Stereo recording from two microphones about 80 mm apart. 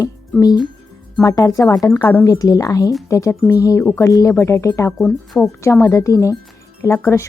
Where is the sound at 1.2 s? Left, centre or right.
Left.